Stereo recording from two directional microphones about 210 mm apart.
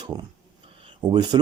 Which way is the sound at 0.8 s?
20° right (ahead or behind).